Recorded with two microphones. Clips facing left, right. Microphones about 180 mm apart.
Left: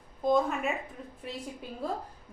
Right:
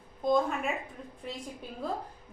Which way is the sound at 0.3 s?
Centre (ahead or behind).